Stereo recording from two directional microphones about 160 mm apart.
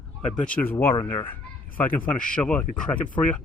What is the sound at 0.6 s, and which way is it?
Speech, 10° left (ahead or behind).